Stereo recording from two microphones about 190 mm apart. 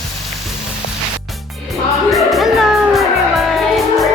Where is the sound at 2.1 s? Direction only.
Centre (ahead or behind).